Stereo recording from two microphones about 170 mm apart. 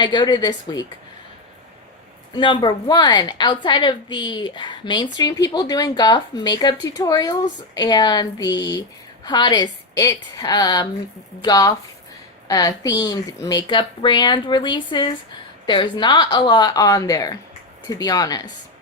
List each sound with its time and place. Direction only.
0.0 s a woman's voice: 25° left (ahead or behind)
2.3 s a woman's voice: 25° left (ahead or behind)